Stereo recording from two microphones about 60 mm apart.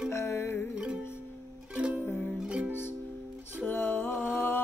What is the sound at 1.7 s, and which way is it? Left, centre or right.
Music, right.